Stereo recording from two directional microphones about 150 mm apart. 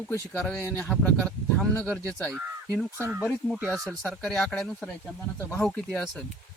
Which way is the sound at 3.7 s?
5° left (ahead or behind).